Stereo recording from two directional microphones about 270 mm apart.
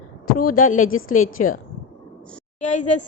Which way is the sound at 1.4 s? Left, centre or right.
Left.